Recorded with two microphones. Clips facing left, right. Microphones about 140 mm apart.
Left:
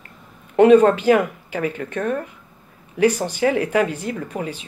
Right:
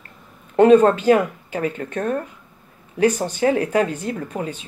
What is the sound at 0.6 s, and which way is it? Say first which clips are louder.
Speech: even; 35° right (ahead or behind).